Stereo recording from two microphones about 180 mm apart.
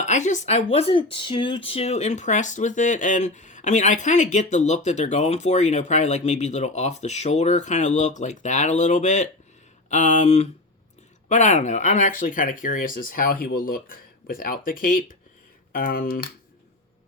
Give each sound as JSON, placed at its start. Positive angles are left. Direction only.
{"t": 0.0, "sound": "speech", "side_deg": 40}